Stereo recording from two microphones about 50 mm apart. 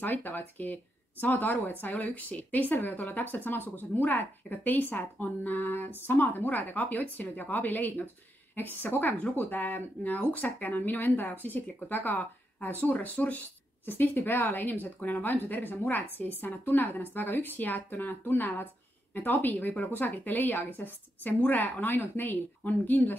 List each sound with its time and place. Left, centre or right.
0.0 s speech: left